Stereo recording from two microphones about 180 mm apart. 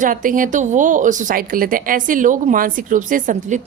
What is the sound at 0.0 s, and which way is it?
Speech, 50° right (ahead or behind).